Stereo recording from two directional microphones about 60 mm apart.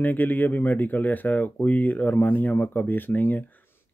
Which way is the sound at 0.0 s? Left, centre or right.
Left.